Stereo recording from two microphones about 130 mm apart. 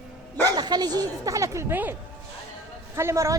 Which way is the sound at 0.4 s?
35° right (ahead or behind).